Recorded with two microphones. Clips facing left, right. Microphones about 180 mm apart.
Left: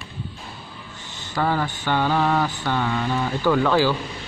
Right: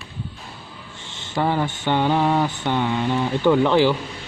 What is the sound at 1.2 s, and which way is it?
Mantra, 25° right (ahead or behind).